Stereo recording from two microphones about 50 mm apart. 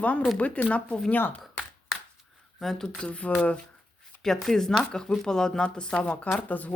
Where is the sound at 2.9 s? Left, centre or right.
Left.